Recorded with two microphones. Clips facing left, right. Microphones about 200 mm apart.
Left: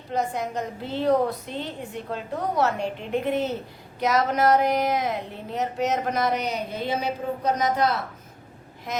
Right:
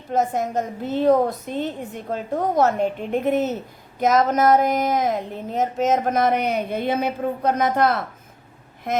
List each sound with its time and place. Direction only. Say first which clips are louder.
0.1 s speech: right 5 dB; 45° right (ahead or behind)